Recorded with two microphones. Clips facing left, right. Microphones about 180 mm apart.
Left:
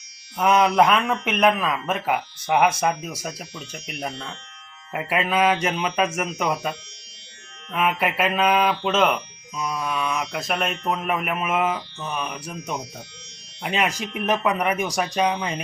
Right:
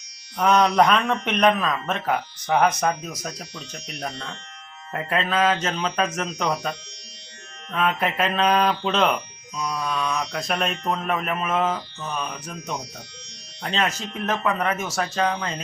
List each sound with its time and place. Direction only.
0.3 s a man's voice: 5° left (ahead or behind)